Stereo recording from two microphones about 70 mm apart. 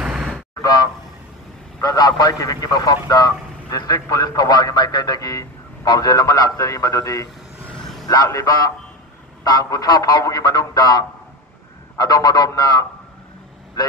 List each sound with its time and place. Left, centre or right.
0.0 s vehicle: centre
1.8 s a man's voice: left
12.0 s speech: left